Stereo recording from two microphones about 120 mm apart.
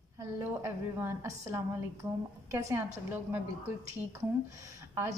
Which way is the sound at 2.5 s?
25° right (ahead or behind).